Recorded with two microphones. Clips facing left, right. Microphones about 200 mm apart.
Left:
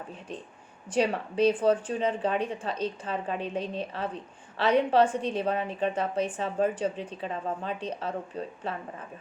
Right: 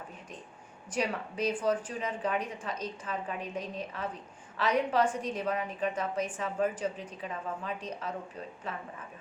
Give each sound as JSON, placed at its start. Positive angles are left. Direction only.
{"t": 0.9, "sound": "a woman's voice", "side_deg": 30}